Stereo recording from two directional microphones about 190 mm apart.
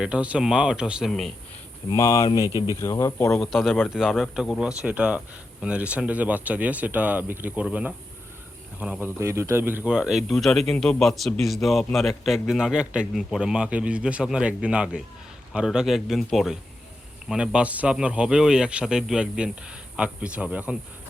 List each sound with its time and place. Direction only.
0.0 s a man's voice: 5° right (ahead or behind)
1.9 s speech: 15° left (ahead or behind)
3.4 s a man's voice: centre (ahead or behind)